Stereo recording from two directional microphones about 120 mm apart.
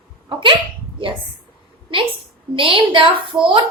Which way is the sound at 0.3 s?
45° right (ahead or behind).